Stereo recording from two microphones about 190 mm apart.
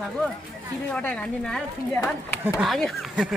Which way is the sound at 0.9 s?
5° left (ahead or behind).